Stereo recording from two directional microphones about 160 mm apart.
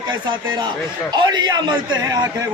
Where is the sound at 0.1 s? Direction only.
25° right (ahead or behind).